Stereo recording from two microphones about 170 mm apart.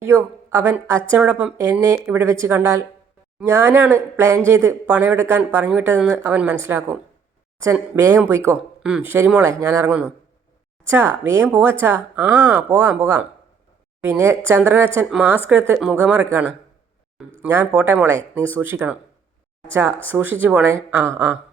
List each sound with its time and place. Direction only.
0.0 s a woman's voice: 15° right (ahead or behind)